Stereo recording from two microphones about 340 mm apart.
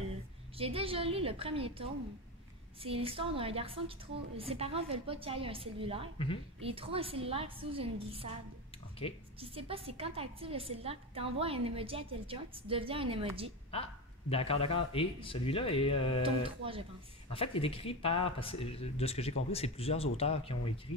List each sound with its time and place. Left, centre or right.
0.6 s a woman's voice: centre
9.0 s speech: centre
9.4 s a woman's voice: centre
14.3 s speech: centre
16.2 s a woman's voice: centre
17.3 s speech: centre